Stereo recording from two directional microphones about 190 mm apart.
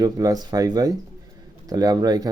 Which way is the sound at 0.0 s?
20° right (ahead or behind).